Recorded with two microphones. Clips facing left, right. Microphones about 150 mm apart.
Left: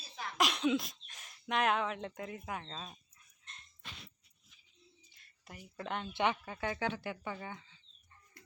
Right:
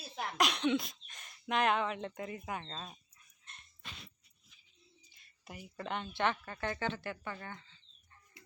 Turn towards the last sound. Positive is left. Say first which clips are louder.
# left 2 dB
turn(degrees=5)  # may be behind; listen again after turning